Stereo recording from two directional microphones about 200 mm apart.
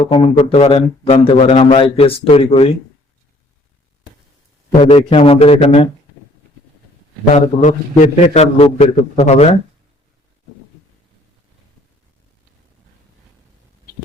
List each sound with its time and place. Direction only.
0.3 s a man's voice: 30° left (ahead or behind)
4.8 s a man's voice: 30° left (ahead or behind)
7.3 s a man's voice: 35° left (ahead or behind)